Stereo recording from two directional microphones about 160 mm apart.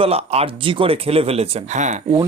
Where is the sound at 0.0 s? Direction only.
40° right (ahead or behind).